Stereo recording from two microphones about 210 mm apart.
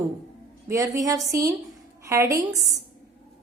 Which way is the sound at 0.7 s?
15° right (ahead or behind).